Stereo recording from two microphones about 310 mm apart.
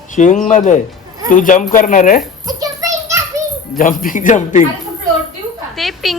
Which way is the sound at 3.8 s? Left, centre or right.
Left.